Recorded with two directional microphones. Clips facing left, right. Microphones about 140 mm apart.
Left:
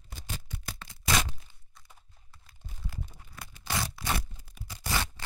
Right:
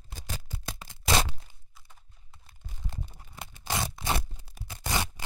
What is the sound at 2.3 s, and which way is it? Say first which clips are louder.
Crunch: right 1 dB; 25° right (ahead or behind).